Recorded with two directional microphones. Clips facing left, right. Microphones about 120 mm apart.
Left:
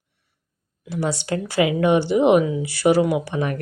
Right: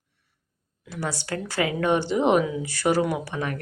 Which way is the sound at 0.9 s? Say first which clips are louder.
Left 6 dB; 20° left (ahead or behind).